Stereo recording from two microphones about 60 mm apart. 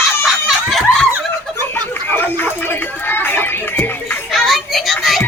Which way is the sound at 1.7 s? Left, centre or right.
Left.